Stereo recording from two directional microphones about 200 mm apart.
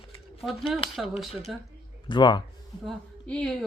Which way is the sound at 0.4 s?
Centre (ahead or behind).